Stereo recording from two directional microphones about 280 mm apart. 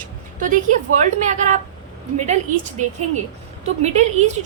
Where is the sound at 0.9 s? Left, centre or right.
Right.